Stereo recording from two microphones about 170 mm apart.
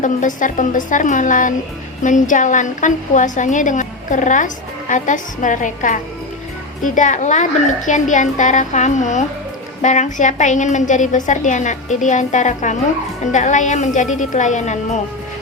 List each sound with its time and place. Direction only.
0.0 s a woman's voice: 50° left (ahead or behind)